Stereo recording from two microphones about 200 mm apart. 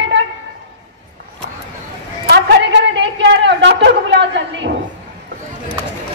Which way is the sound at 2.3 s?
60° right (ahead or behind).